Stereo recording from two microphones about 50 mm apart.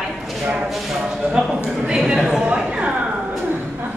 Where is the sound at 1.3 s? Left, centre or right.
Centre.